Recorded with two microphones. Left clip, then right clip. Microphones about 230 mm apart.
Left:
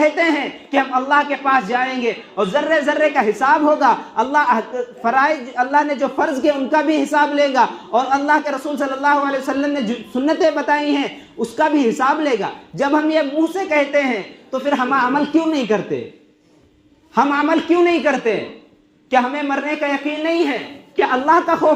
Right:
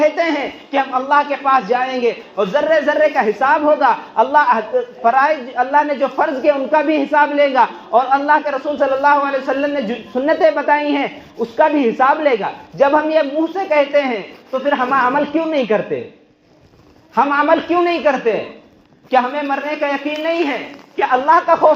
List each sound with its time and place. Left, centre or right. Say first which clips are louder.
0.0 s a man's voice: right 1 dB; left
17.2 s a man's voice: right 3 dB; left